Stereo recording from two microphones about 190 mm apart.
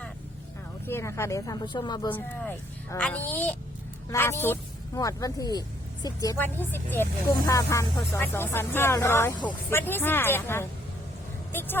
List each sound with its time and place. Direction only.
0.9 s a woman's voice: 15° left (ahead or behind)
2.1 s speech: 10° left (ahead or behind)